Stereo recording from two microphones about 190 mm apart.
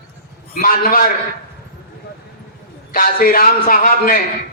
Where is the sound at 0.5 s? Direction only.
50° left (ahead or behind).